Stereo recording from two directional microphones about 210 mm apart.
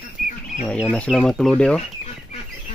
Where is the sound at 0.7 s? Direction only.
5° left (ahead or behind).